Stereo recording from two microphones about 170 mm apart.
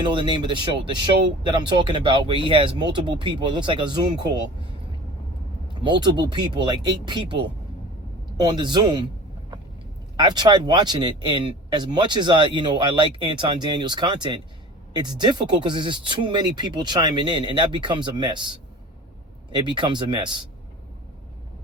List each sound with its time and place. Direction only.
0.0 s speech: 30° right (ahead or behind)
5.8 s speech: 25° right (ahead or behind)
10.2 s speech: 25° right (ahead or behind)